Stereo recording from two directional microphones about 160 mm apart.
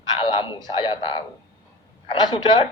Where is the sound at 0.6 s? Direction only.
30° left (ahead or behind).